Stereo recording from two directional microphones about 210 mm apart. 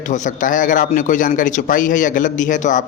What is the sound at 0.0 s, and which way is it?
A man's voice, 35° left (ahead or behind).